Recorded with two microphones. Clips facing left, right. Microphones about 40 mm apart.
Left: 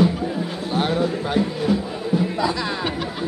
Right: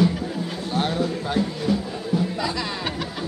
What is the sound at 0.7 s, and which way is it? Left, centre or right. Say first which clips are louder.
Music: left 3 dB; left.